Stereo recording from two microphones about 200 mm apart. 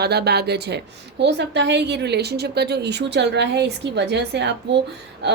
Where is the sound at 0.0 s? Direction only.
55° right (ahead or behind).